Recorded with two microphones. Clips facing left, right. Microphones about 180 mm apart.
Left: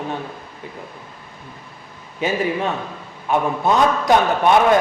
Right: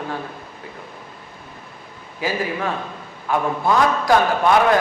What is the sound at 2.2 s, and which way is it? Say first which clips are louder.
A man's voice: left 3 dB; 25° left (ahead or behind).